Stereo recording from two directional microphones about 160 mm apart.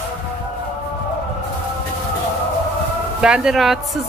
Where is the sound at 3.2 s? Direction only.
5° right (ahead or behind).